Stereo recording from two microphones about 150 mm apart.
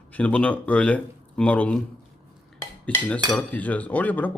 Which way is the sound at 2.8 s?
10° left (ahead or behind).